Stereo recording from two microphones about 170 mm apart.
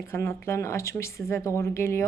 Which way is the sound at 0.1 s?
15° left (ahead or behind).